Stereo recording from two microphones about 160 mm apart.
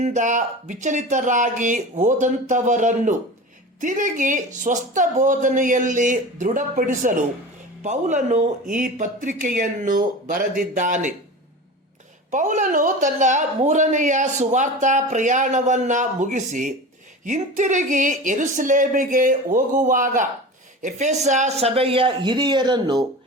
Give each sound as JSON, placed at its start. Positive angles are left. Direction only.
{"t": 0.0, "sound": "a woman's voice", "side_deg": -50}
{"t": 12.3, "sound": "a woman's voice", "side_deg": -50}